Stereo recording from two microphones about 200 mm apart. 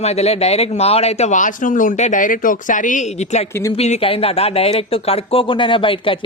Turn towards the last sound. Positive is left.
turn(degrees=25)  # may be behind; listen again after turning